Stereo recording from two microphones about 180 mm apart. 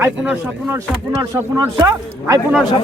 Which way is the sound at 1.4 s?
15° right (ahead or behind).